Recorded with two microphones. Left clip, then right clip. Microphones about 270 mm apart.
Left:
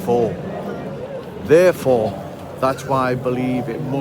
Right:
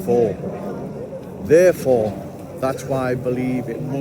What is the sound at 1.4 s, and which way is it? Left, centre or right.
A man's voice, centre.